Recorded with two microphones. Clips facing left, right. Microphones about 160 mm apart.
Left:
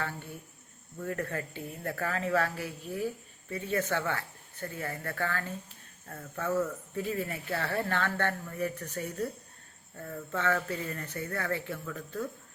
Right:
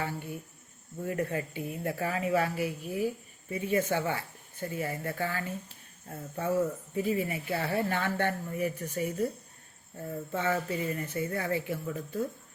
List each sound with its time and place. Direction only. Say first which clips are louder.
0.0 s speech: right 2 dB; 15° right (ahead or behind)